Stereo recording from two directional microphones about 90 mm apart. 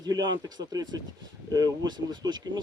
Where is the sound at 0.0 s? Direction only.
50° right (ahead or behind).